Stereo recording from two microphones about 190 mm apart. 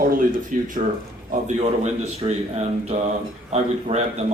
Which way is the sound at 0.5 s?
45° right (ahead or behind).